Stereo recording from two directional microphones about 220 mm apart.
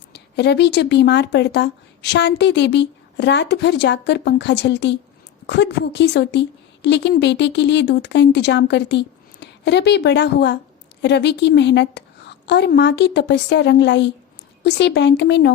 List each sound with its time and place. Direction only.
0.1 s speech: 50° left (ahead or behind)